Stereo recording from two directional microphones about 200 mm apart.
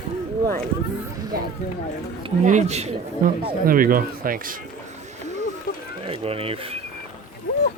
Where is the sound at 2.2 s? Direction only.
35° right (ahead or behind).